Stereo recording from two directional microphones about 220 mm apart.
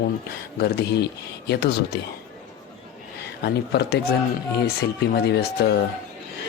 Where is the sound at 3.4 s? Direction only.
50° left (ahead or behind).